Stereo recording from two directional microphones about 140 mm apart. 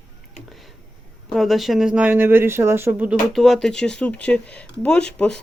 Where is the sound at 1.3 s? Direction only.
Centre (ahead or behind).